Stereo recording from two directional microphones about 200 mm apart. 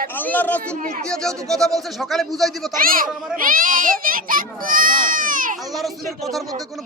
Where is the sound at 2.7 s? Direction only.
45° right (ahead or behind).